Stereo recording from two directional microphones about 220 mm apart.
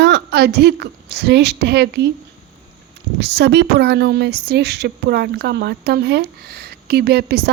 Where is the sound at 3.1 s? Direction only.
50° right (ahead or behind).